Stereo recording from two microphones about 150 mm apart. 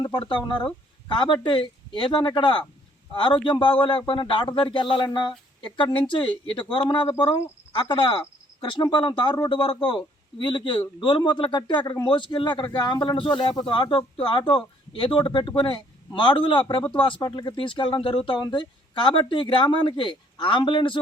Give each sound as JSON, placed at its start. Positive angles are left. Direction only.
{"t": 0.6, "sound": "speech", "side_deg": 30}